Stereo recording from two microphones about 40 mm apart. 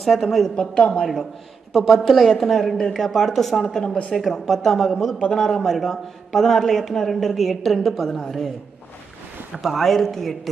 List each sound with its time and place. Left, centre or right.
0.0 s speech: centre
0.7 s a woman's voice: left
1.7 s speech: centre
9.6 s speech: centre
9.8 s speech: centre